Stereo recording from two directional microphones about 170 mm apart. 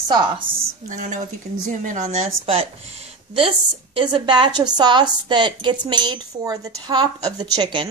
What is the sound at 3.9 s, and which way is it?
A woman's voice, 30° right (ahead or behind).